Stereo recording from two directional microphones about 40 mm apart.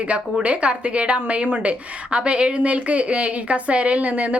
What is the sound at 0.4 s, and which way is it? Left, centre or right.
A woman's voice, right.